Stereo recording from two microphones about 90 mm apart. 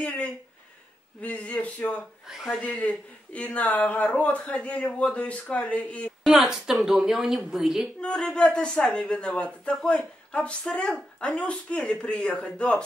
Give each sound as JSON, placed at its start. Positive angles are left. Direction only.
{"t": 0.0, "sound": "a sound", "side_deg": 15}
{"t": 1.2, "sound": "speech", "side_deg": 15}
{"t": 2.2, "sound": "a woman's voice", "side_deg": -5}
{"t": 2.6, "sound": "speech", "side_deg": 15}
{"t": 6.2, "sound": "a woman's voice", "side_deg": -5}
{"t": 8.0, "sound": "speech", "side_deg": 5}